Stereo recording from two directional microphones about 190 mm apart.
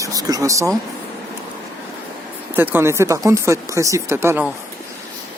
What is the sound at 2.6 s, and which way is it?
Speech, 10° right (ahead or behind).